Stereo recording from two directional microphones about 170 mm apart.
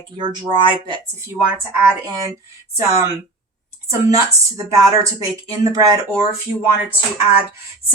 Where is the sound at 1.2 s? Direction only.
10° right (ahead or behind).